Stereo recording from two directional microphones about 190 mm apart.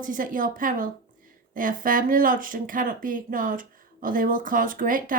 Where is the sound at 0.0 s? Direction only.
45° right (ahead or behind).